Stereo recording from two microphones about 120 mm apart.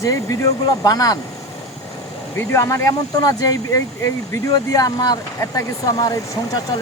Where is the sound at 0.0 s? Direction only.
25° left (ahead or behind).